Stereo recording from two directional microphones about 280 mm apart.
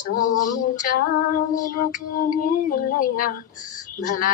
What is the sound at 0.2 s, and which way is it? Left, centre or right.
Speech, left.